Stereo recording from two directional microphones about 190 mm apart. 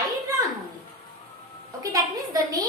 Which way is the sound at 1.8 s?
20° right (ahead or behind).